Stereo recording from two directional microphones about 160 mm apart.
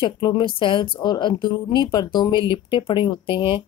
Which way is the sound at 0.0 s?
25° left (ahead or behind).